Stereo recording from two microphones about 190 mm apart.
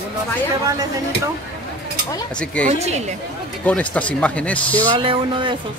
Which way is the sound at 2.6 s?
35° right (ahead or behind).